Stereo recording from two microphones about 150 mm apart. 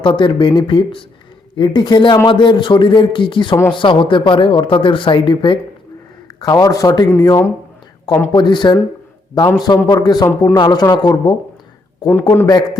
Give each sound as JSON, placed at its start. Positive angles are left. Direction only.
{"t": 0.0, "sound": "speech", "side_deg": 30}
{"t": 8.3, "sound": "speech", "side_deg": 30}